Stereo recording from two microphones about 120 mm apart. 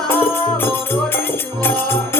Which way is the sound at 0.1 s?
15° left (ahead or behind).